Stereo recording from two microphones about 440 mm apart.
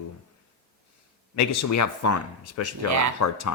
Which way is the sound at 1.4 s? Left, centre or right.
Left.